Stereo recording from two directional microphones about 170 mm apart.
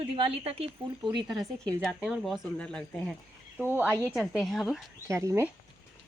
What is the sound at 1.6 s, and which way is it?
Speech, 5° left (ahead or behind).